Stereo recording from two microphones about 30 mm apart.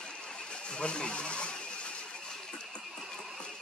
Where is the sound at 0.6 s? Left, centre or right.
Left.